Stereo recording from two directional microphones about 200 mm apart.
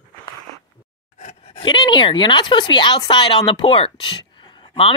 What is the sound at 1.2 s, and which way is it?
Speech, 35° left (ahead or behind).